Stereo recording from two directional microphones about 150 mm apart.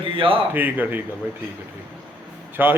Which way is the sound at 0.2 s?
35° right (ahead or behind).